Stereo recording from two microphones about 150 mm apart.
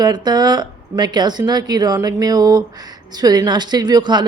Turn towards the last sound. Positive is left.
turn(degrees=-30)  # may be behind; listen again after turning